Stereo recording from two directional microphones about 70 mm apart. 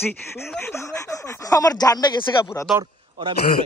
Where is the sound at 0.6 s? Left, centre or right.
Left.